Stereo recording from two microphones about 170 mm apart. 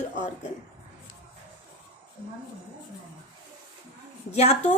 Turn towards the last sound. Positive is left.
turn(degrees=40)  # may be behind; listen again after turning